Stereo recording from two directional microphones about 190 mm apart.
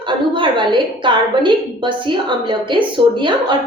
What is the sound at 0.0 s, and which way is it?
A woman's voice, 25° right (ahead or behind).